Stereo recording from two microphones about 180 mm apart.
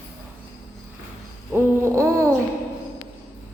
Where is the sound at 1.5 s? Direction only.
15° right (ahead or behind).